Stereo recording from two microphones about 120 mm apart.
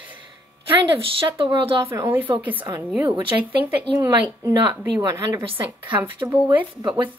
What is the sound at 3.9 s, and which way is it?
A woman's voice, 30° right (ahead or behind).